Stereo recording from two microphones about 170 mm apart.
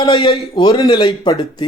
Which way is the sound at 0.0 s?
35° left (ahead or behind).